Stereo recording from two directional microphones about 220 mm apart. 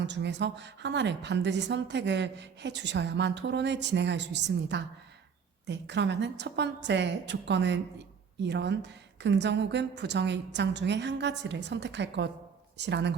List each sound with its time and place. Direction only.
0.0 s a woman's voice: 50° right (ahead or behind)